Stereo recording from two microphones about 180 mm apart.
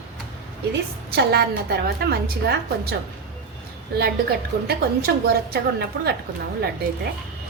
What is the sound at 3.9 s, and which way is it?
A woman's voice, 60° right (ahead or behind).